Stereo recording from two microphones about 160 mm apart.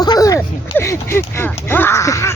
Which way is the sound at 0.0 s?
25° left (ahead or behind).